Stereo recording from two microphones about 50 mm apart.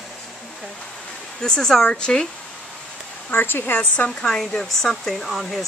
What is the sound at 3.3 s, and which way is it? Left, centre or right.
Speech, left.